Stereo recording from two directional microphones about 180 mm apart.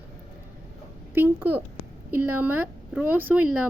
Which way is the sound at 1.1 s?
10° right (ahead or behind).